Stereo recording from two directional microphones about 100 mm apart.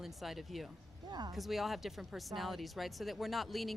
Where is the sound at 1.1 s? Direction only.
45° right (ahead or behind).